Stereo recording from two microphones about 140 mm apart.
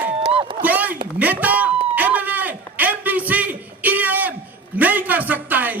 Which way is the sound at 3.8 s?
10° right (ahead or behind).